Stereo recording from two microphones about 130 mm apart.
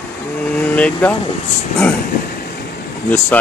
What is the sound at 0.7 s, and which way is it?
Speech, 10° left (ahead or behind).